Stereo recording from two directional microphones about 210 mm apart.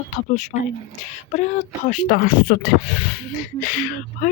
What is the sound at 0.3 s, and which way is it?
Speech, 35° left (ahead or behind).